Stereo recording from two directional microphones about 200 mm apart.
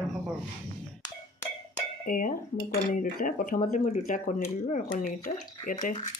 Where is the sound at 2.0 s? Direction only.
45° left (ahead or behind).